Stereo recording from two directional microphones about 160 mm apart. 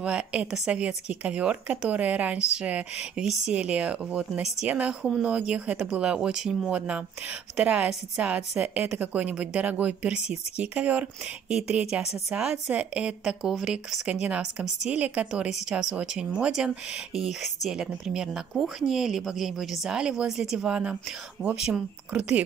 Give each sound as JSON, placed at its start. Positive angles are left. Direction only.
{"t": 0.0, "sound": "speech", "side_deg": -5}